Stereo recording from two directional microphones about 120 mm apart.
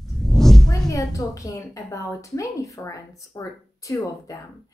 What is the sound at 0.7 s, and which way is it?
A woman's voice, 30° left (ahead or behind).